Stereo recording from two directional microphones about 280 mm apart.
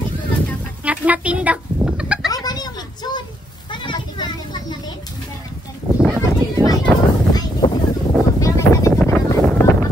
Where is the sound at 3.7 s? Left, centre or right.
Centre.